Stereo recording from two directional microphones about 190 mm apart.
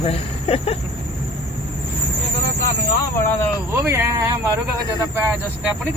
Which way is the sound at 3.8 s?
15° right (ahead or behind).